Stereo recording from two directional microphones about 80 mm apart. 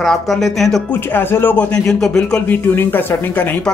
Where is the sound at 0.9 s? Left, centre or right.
Left.